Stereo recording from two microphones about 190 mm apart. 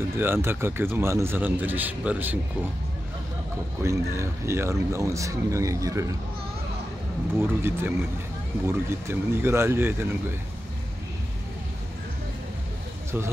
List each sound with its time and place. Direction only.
0.2 s speech: 10° right (ahead or behind)
3.8 s speech: 15° right (ahead or behind)
7.3 s speech: 10° right (ahead or behind)